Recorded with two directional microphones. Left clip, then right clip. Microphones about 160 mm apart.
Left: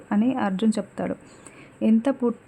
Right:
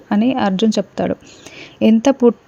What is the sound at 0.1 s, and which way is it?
Speech, 40° right (ahead or behind).